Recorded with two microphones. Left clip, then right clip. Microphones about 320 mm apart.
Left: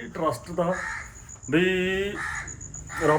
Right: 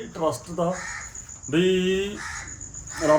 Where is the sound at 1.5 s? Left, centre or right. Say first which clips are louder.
Right 1 dB; centre.